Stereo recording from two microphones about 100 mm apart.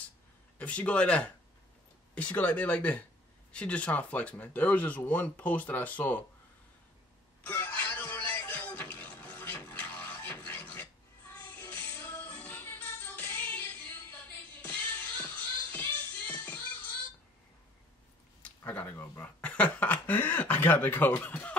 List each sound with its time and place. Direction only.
0.6 s speech: 15° left (ahead or behind)
7.4 s music: 20° left (ahead or behind)
18.6 s speech: 20° left (ahead or behind)